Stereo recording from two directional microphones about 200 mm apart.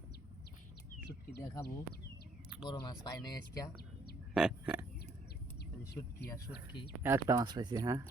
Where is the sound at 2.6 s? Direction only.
20° left (ahead or behind).